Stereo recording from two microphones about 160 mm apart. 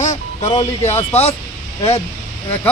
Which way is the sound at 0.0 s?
45° left (ahead or behind).